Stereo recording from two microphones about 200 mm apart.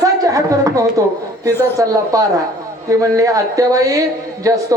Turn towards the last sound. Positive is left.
turn(degrees=-15)  # may be behind; listen again after turning